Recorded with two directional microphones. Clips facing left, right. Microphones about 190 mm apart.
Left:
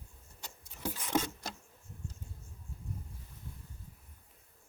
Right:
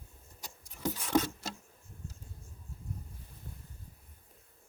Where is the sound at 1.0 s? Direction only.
10° left (ahead or behind).